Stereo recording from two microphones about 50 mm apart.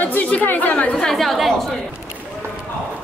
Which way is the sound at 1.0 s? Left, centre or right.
Centre.